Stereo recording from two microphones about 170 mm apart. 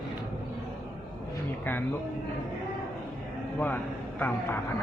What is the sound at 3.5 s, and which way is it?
A man's voice, 10° left (ahead or behind).